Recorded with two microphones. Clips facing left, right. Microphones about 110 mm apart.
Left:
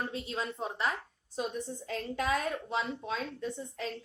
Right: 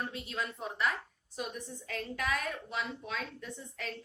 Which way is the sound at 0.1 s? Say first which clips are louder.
Left 2 dB; 30° left (ahead or behind).